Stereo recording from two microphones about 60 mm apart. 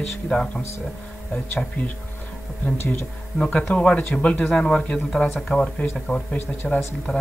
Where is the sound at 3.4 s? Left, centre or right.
Centre.